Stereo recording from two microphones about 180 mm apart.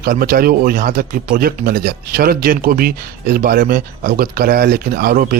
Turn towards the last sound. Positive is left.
turn(degrees=-55)  # may be behind; listen again after turning